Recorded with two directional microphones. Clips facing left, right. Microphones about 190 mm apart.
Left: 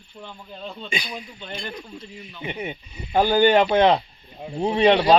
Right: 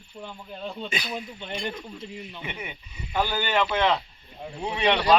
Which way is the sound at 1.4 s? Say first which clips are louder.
Right 1 dB; 15° right (ahead or behind).